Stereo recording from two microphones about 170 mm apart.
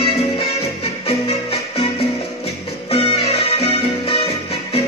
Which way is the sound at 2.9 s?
35° left (ahead or behind).